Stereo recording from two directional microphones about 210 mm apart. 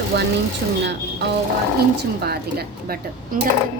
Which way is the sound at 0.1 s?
50° right (ahead or behind).